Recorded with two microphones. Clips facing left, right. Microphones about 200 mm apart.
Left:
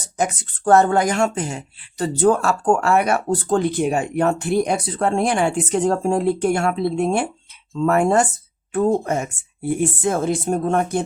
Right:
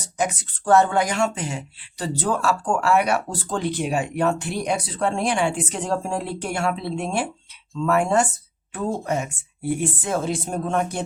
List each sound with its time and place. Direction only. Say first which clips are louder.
0.2 s speech: left 2 dB; 45° left (ahead or behind)